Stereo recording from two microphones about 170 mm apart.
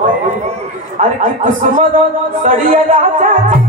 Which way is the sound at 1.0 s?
50° right (ahead or behind).